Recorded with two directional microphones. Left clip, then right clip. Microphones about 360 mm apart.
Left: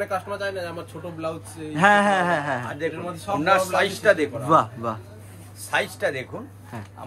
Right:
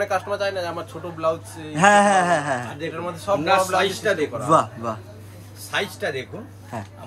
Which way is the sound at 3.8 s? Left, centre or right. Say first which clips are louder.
Left 1 dB; centre.